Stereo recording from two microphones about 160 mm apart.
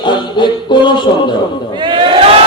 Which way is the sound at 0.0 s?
30° left (ahead or behind).